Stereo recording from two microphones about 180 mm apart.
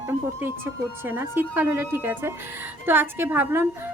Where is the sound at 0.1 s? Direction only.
10° right (ahead or behind).